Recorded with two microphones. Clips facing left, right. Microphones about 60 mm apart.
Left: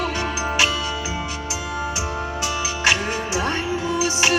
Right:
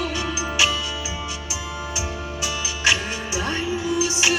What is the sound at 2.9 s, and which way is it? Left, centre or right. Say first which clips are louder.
Music: left 1 dB; left.